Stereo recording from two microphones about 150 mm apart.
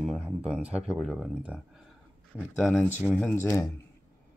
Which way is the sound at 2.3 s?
5° left (ahead or behind).